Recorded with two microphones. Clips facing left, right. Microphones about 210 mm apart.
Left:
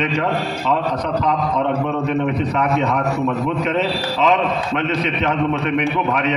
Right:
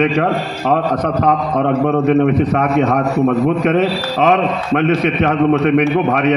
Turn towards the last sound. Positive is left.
turn(degrees=-50)  # may be behind; listen again after turning